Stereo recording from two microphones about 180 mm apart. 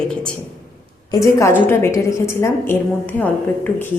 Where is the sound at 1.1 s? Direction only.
15° left (ahead or behind).